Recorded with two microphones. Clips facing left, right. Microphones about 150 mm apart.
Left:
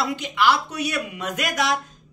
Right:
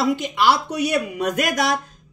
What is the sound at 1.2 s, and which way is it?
Speech, 45° right (ahead or behind).